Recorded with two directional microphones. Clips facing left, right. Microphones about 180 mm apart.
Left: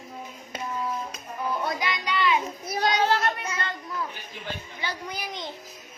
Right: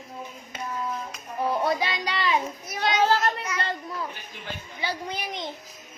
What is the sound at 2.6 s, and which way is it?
Children playing, 35° left (ahead or behind).